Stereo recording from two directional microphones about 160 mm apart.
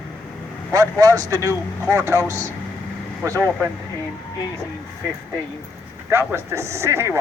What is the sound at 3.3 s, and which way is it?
Speech, 10° left (ahead or behind).